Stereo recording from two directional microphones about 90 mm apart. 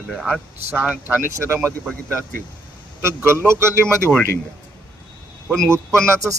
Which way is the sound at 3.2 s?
30° right (ahead or behind).